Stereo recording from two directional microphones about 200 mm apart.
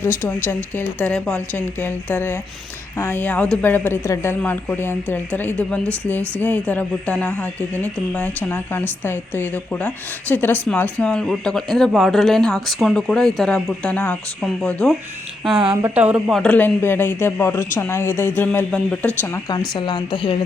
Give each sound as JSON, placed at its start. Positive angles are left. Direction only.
{"t": 0.4, "sound": "speech", "side_deg": 10}
{"t": 15.5, "sound": "speech", "side_deg": -25}
{"t": 15.8, "sound": "speech", "side_deg": -10}
{"t": 16.4, "sound": "speech", "side_deg": 5}